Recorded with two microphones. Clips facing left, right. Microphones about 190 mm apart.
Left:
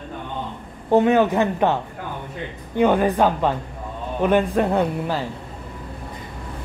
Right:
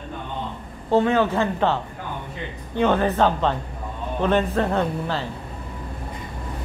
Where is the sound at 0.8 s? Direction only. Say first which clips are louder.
Left 3 dB; 15° left (ahead or behind).